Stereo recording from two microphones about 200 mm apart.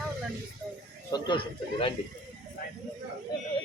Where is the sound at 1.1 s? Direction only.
25° left (ahead or behind).